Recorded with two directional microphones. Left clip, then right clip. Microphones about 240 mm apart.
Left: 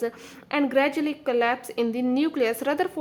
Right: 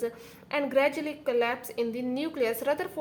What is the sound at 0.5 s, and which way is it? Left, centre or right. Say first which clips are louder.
A woman's voice: left 3 dB; left.